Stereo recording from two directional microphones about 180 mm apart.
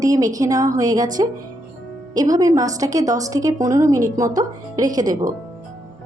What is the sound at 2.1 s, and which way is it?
A woman's voice, 20° right (ahead or behind).